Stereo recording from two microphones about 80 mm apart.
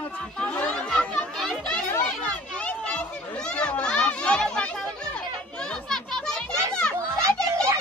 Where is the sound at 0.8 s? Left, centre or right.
Centre.